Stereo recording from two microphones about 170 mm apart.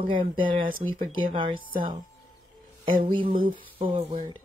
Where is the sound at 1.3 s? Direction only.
30° right (ahead or behind).